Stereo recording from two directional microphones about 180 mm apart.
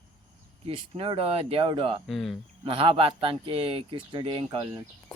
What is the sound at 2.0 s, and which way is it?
Speech, centre (ahead or behind).